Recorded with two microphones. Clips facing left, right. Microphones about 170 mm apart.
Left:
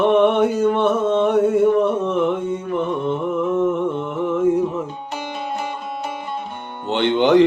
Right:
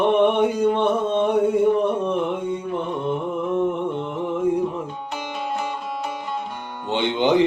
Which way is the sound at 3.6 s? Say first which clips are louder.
Left 3 dB; 15° right (ahead or behind).